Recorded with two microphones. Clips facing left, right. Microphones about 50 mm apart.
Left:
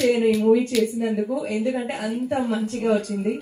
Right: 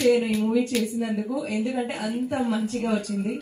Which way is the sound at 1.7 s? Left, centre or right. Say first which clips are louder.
Left 2 dB; left.